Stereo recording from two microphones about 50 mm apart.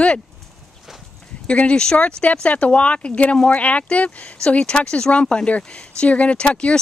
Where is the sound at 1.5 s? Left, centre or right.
Left.